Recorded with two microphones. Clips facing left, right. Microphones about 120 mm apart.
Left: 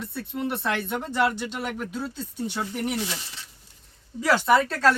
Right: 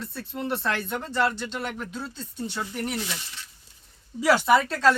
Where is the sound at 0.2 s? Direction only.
5° left (ahead or behind).